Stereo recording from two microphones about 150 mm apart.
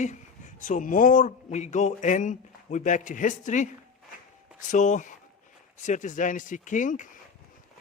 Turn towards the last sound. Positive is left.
turn(degrees=60)  # may be behind; listen again after turning